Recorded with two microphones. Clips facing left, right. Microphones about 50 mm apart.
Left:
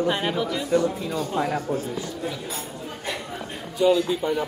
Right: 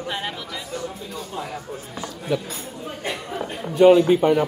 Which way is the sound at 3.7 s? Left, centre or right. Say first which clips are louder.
Right 7 dB; right.